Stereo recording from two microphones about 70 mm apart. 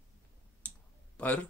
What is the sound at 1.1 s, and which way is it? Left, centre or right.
Speech, centre.